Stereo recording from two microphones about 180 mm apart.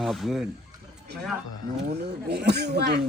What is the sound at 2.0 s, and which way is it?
Speech, 65° right (ahead or behind).